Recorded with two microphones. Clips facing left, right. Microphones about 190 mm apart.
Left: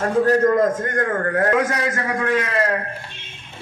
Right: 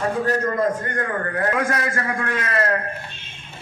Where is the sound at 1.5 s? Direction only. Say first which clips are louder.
Left 3 dB; 20° left (ahead or behind).